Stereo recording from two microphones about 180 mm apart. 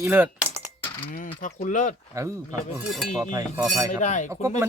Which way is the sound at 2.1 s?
15° right (ahead or behind).